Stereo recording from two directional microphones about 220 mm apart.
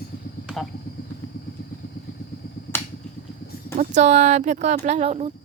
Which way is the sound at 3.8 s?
30° right (ahead or behind).